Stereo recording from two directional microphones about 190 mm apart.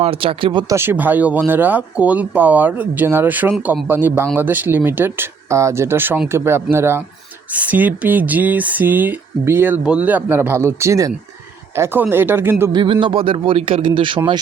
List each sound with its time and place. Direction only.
0.0 s speech: 30° right (ahead or behind)
0.7 s speech: 10° right (ahead or behind)
12.7 s speech: 25° right (ahead or behind)